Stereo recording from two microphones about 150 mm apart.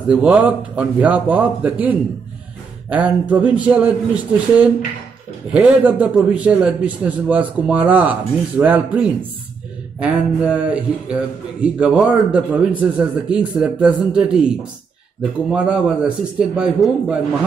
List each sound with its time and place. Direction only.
0.1 s a man's voice: 5° right (ahead or behind)
15.5 s a man's voice: 5° right (ahead or behind)